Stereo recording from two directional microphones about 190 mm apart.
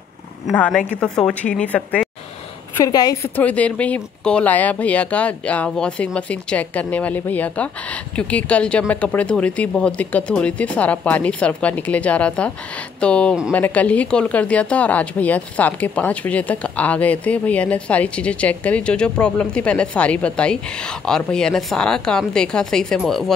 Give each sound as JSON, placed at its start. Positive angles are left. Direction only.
{"t": 0.5, "sound": "a woman's voice", "side_deg": 5}
{"t": 2.8, "sound": "a woman's voice", "side_deg": 20}
{"t": 3.3, "sound": "a woman's voice", "side_deg": 5}